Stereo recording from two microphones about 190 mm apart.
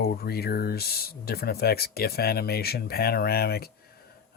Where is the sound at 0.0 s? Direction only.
55° left (ahead or behind).